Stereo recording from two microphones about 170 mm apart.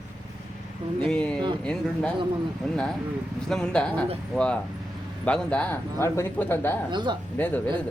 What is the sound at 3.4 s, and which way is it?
Speech, 5° left (ahead or behind).